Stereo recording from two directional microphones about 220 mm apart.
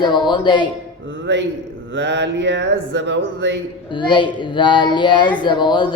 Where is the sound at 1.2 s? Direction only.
50° right (ahead or behind).